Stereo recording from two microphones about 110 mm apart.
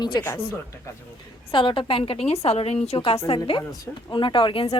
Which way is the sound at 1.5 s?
50° left (ahead or behind).